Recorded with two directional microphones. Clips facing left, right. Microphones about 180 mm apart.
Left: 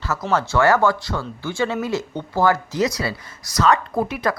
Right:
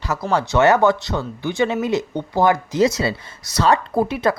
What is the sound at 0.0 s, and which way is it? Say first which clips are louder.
A woman's voice: right 1 dB; 15° right (ahead or behind).